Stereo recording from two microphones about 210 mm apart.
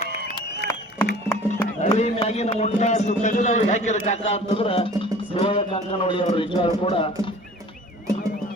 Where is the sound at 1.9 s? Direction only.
30° left (ahead or behind).